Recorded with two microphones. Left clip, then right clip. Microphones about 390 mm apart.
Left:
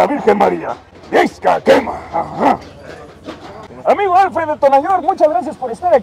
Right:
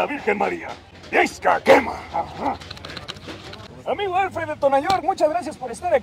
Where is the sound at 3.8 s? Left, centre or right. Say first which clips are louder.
Left 12 dB; left.